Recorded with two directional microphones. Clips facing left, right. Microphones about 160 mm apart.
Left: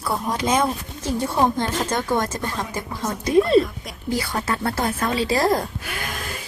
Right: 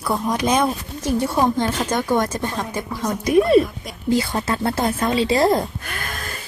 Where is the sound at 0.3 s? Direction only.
20° right (ahead or behind).